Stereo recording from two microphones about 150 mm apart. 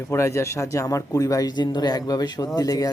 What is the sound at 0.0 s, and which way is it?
Speech, 20° left (ahead or behind).